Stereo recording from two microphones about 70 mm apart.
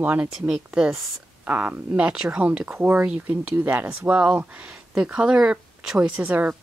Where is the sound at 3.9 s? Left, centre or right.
Centre.